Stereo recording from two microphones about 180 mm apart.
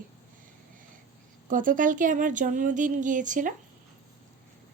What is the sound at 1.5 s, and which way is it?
Speech, 50° right (ahead or behind).